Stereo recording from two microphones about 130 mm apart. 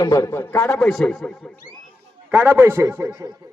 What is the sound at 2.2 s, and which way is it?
A man's voice, 15° right (ahead or behind).